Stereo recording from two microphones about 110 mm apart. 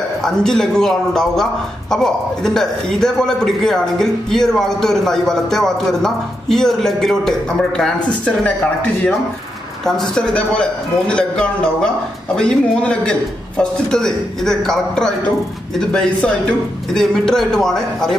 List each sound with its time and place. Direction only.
0.2 s a man's voice: 5° left (ahead or behind)
9.8 s a man's voice: 5° left (ahead or behind)